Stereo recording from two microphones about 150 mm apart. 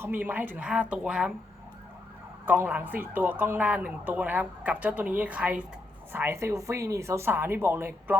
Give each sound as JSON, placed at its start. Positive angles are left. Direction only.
{"t": 0.0, "sound": "speech", "side_deg": -15}
{"t": 2.6, "sound": "speech", "side_deg": -10}